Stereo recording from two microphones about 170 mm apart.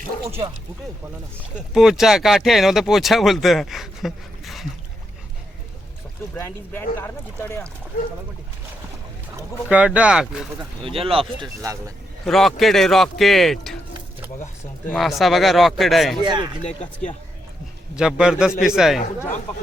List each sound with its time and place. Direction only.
0.3 s speech: 35° right (ahead or behind)
1.5 s speech: 5° right (ahead or behind)
6.3 s speech: 15° left (ahead or behind)
9.6 s speech: 5° right (ahead or behind)
10.8 s speech: 35° right (ahead or behind)
12.2 s speech: centre (ahead or behind)
14.8 s speech: centre (ahead or behind)
16.2 s speech: 25° right (ahead or behind)
16.6 s speech: 45° left (ahead or behind)
17.9 s speech: 5° right (ahead or behind)